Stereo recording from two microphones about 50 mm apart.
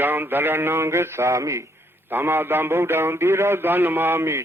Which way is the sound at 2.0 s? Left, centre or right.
Right.